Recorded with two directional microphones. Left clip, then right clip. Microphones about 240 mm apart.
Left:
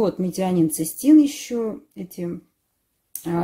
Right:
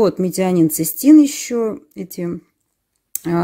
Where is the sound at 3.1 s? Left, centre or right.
Right.